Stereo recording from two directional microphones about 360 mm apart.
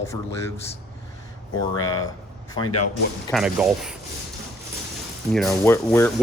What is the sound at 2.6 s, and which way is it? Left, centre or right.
Speech, left.